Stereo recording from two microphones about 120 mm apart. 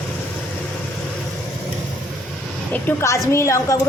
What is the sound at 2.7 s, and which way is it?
A woman's voice, 20° left (ahead or behind).